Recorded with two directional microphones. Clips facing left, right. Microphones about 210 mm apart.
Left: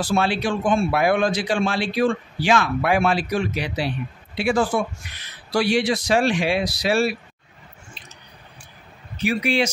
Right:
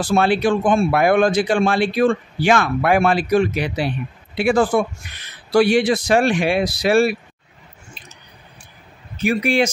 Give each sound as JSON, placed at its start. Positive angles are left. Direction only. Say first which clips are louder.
{"t": 0.0, "sound": "a man's voice", "louder": "right 5 dB", "side_deg": -55}
{"t": 9.2, "sound": "speech", "louder": "right 3 dB", "side_deg": -50}